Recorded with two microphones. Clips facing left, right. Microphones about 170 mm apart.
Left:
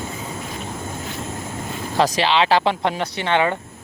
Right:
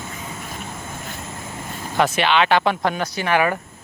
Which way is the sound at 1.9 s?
30° left (ahead or behind).